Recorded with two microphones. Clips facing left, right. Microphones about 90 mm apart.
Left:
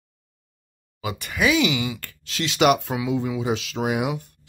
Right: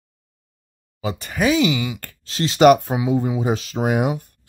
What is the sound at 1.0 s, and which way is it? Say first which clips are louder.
Speech: right 2 dB; 35° right (ahead or behind).